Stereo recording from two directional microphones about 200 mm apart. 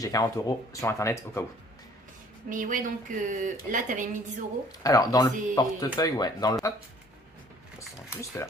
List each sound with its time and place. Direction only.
0.0 s speech: 15° left (ahead or behind)
2.5 s a woman's voice: 40° right (ahead or behind)
4.8 s speech: 20° left (ahead or behind)
7.8 s speech: 15° left (ahead or behind)